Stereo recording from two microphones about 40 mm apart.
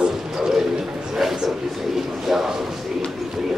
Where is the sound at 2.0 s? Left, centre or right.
Centre.